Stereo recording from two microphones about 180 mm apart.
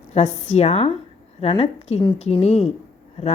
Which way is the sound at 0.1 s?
40° left (ahead or behind).